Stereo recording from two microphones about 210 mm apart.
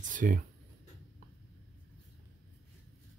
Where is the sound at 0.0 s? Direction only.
40° right (ahead or behind).